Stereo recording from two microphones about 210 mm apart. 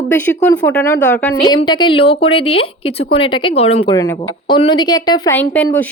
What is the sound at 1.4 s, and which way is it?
A woman's voice, 20° left (ahead or behind).